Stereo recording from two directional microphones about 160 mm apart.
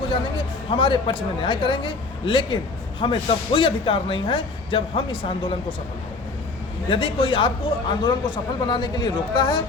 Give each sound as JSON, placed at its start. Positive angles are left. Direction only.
{"t": 0.1, "sound": "speech", "side_deg": 30}
{"t": 6.9, "sound": "speech", "side_deg": 35}